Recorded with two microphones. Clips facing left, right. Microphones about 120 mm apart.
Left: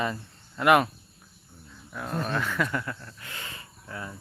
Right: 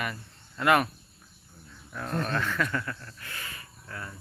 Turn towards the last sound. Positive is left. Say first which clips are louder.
# left 2 dB
turn(degrees=15)  # may be behind; listen again after turning